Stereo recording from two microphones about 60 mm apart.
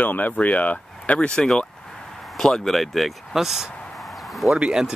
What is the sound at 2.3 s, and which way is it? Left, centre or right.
Speech, centre.